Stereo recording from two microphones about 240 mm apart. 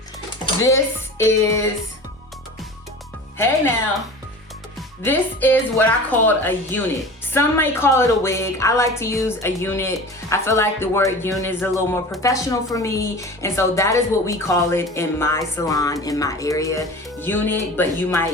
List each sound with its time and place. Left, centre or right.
1.2 s a woman's voice: centre
5.0 s a woman's voice: centre